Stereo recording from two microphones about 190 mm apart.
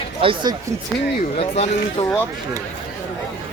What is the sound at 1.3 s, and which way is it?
Speech, 35° left (ahead or behind).